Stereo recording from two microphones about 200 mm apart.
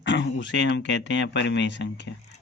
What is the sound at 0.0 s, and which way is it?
Speech, 65° left (ahead or behind).